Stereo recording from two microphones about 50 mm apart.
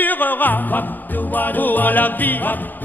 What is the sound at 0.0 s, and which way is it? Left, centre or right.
Music, left.